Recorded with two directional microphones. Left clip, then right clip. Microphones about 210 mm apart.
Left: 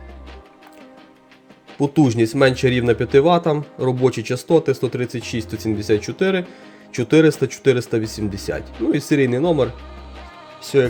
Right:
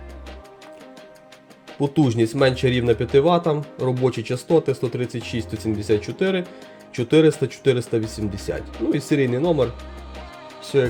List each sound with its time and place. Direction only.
1.8 s speech: 15° left (ahead or behind)